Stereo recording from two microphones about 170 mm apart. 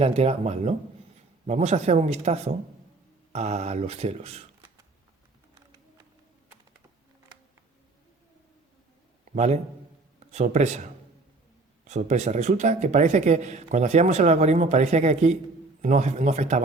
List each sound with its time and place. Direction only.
0.0 s speech: 35° right (ahead or behind)
9.3 s a man's voice: 40° right (ahead or behind)
11.9 s speech: 45° right (ahead or behind)